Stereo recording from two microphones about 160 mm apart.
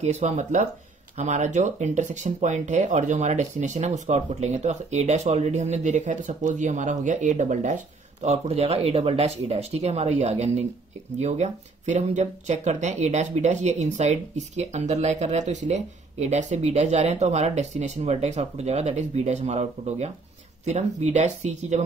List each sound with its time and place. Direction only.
0.0 s speech: 45° right (ahead or behind)